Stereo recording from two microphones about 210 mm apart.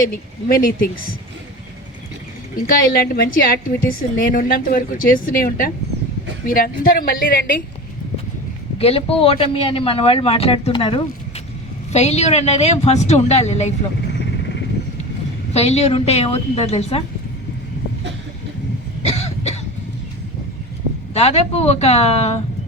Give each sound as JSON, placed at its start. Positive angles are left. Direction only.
{"t": 0.1, "sound": "a woman's voice", "side_deg": 45}
{"t": 2.6, "sound": "a woman's voice", "side_deg": 45}
{"t": 8.8, "sound": "a man's voice", "side_deg": 30}
{"t": 15.5, "sound": "a man's voice", "side_deg": 30}
{"t": 19.0, "sound": "cough", "side_deg": 30}
{"t": 21.1, "sound": "a man's voice", "side_deg": 30}